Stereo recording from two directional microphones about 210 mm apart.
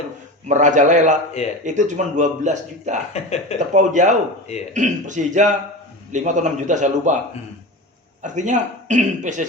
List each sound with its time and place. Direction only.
0.4 s speech: 35° right (ahead or behind)
3.1 s speech: 30° left (ahead or behind)
3.8 s speech: 35° right (ahead or behind)
8.2 s speech: 35° right (ahead or behind)